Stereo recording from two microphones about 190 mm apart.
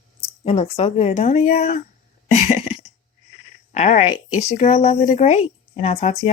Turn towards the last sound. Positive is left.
turn(degrees=35)  # may be behind; listen again after turning